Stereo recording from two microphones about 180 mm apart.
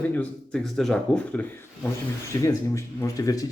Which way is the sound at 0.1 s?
5° left (ahead or behind).